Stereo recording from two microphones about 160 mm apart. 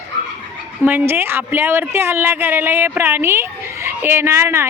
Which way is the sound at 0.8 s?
15° right (ahead or behind).